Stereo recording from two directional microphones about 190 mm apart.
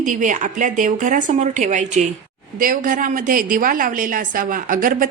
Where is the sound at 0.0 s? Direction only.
40° right (ahead or behind).